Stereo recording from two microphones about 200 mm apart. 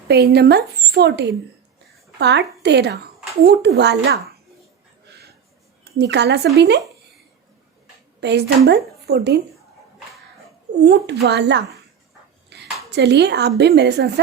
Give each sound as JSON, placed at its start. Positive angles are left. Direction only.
{"t": 0.1, "sound": "speech", "side_deg": -55}
{"t": 6.0, "sound": "speech", "side_deg": -60}
{"t": 8.2, "sound": "speech", "side_deg": -60}
{"t": 10.8, "sound": "speech", "side_deg": -60}
{"t": 12.5, "sound": "a sound", "side_deg": -60}
{"t": 12.9, "sound": "speech", "side_deg": -60}